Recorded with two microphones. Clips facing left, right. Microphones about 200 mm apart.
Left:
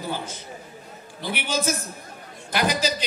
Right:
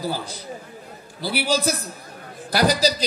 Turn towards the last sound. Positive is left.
turn(degrees=-35)  # may be behind; listen again after turning